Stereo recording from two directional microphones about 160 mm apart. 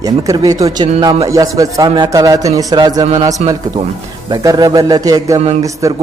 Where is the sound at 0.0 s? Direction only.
20° right (ahead or behind).